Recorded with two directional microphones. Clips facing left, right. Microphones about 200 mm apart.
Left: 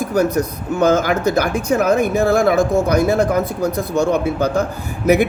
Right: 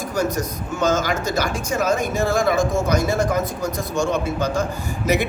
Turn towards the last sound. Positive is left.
turn(degrees=55)  # may be behind; listen again after turning